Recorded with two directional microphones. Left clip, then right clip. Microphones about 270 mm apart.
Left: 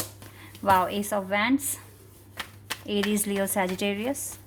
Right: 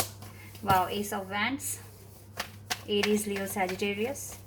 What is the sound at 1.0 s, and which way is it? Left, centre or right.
Speech, left.